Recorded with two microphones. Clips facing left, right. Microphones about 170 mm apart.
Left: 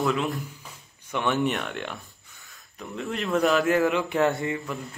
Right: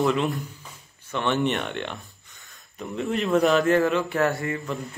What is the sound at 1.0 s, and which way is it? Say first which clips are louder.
Speech: even; 15° left (ahead or behind).